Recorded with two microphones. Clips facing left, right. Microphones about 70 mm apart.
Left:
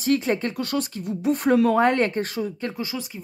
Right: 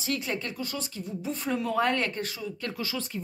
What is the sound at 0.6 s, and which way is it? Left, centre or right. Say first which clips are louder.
Speech: left 8 dB; left.